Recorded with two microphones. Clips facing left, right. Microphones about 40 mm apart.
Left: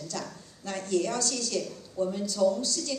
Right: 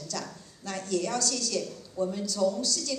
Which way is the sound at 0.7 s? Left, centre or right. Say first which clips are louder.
Left 2 dB; left.